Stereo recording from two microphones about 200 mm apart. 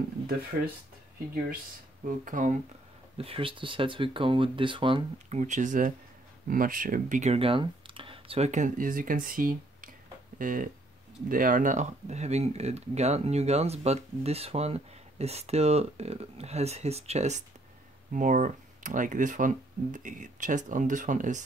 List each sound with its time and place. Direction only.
2.0 s speech: 40° right (ahead or behind)
3.2 s speech: 30° right (ahead or behind)
5.4 s speech: 40° right (ahead or behind)